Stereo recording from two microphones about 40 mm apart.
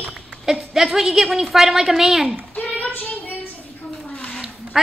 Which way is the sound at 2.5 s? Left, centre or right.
Left.